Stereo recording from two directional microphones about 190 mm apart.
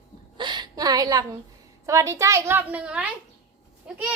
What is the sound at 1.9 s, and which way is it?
A woman's voice, 15° right (ahead or behind).